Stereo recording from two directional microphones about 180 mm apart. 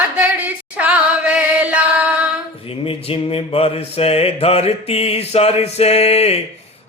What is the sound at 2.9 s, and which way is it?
Mantra, 30° left (ahead or behind).